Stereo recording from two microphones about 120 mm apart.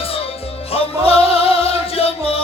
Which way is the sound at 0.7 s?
55° left (ahead or behind).